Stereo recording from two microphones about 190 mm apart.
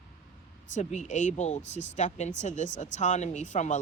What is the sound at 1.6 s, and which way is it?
Speech, 70° left (ahead or behind).